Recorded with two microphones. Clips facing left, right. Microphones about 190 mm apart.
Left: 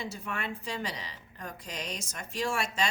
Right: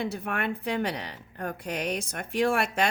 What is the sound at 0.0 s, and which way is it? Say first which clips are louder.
Speech: right 7 dB; 60° right (ahead or behind).